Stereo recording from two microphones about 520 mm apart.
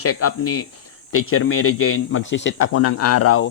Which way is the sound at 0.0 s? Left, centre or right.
Left.